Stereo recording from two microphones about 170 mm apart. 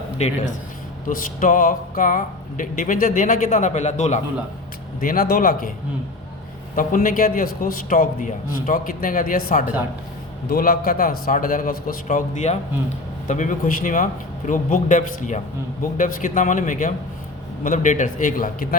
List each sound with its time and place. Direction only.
0.2 s a man's voice: 40° left (ahead or behind)
4.9 s a man's voice: 55° left (ahead or behind)
6.7 s a man's voice: 55° left (ahead or behind)